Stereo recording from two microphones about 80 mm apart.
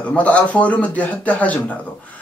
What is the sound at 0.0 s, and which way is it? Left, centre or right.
Speech, centre.